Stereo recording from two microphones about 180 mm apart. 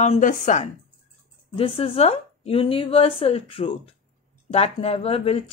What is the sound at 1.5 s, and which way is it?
Speech, 30° left (ahead or behind).